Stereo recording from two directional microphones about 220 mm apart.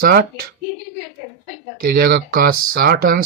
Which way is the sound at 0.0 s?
40° right (ahead or behind).